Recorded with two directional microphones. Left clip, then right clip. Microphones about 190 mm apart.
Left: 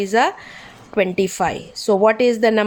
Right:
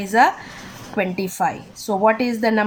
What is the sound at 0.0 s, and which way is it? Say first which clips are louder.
A woman's voice: right 1 dB; 45° left (ahead or behind).